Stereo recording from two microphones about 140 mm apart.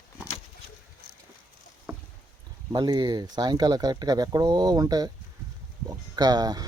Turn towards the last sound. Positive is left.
turn(degrees=-30)  # may be behind; listen again after turning